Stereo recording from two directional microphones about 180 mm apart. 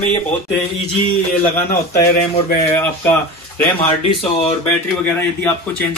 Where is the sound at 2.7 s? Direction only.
10° left (ahead or behind).